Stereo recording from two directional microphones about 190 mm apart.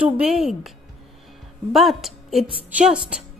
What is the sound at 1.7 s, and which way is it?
A woman's voice, centre (ahead or behind).